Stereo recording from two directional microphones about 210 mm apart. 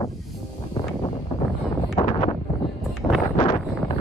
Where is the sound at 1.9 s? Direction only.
30° left (ahead or behind).